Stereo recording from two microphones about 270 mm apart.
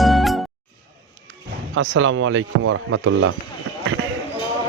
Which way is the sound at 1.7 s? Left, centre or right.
Right.